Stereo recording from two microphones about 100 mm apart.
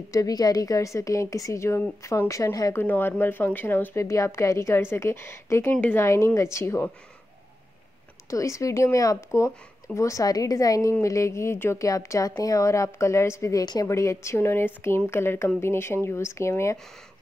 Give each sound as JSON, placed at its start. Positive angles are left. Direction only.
{"t": 0.1, "sound": "a woman's voice", "side_deg": 35}
{"t": 2.8, "sound": "a woman's voice", "side_deg": 20}
{"t": 6.0, "sound": "a woman's voice", "side_deg": 30}
{"t": 8.3, "sound": "a woman's voice", "side_deg": 30}